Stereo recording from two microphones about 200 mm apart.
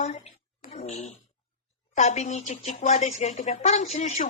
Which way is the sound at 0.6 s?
35° left (ahead or behind).